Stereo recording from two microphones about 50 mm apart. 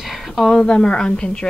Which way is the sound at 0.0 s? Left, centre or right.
Centre.